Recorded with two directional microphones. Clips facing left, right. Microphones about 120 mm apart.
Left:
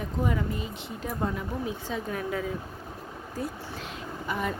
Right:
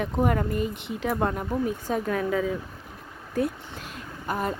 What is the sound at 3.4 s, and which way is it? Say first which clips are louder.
Speech: right 8 dB; 75° right (ahead or behind).